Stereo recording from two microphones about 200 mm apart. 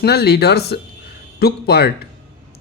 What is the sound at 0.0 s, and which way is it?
A man's voice, 55° left (ahead or behind).